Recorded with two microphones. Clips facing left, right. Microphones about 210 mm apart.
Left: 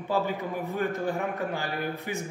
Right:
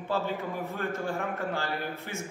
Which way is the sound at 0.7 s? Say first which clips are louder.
Left 5 dB; 15° left (ahead or behind).